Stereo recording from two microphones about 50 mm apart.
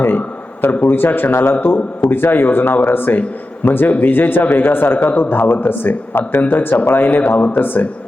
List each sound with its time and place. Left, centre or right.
0.6 s a man's voice: left